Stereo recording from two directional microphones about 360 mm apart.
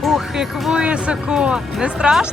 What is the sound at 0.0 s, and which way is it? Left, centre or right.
Speech, centre.